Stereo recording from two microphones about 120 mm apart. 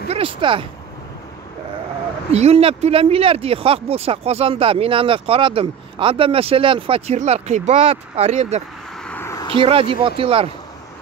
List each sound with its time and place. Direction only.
0.1 s speech: 45° right (ahead or behind)
2.3 s speech: 60° right (ahead or behind)
7.2 s speech: 65° right (ahead or behind)
9.0 s a sound: 15° left (ahead or behind)
9.5 s speech: 50° right (ahead or behind)